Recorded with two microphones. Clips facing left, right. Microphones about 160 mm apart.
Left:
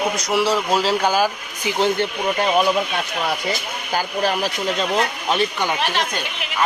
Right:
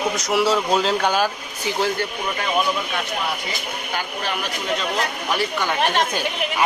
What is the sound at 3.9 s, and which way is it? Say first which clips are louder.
Speech: left 7 dB; 40° left (ahead or behind).